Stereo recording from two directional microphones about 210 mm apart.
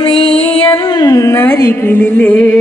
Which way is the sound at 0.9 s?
15° left (ahead or behind).